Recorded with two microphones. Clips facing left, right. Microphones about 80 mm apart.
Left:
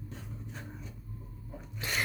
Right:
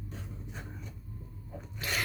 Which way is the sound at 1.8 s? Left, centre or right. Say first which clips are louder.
Right 1 dB; left.